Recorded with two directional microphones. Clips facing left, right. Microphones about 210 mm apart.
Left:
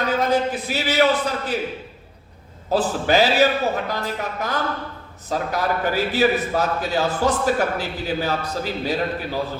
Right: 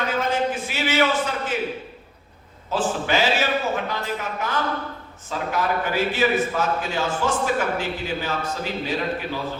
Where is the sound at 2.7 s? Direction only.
40° left (ahead or behind).